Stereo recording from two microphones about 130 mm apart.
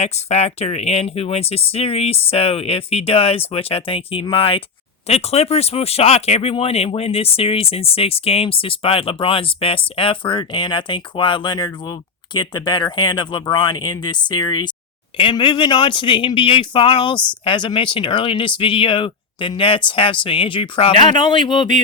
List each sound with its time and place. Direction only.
0.0 s speech: 55° left (ahead or behind); by 21.7 s 35° left (ahead or behind)